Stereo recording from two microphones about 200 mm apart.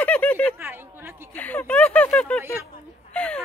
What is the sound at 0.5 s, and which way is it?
Speech, 10° right (ahead or behind).